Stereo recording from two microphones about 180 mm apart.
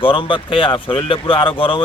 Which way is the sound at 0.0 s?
30° left (ahead or behind).